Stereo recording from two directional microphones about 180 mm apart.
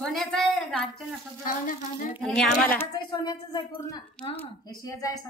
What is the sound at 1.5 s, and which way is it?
Speech, 45° left (ahead or behind).